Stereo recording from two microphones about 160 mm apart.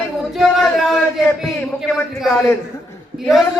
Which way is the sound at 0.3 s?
Centre (ahead or behind).